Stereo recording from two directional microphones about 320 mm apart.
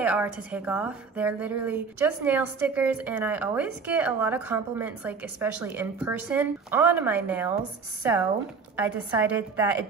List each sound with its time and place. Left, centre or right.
0.0 s a woman's voice: centre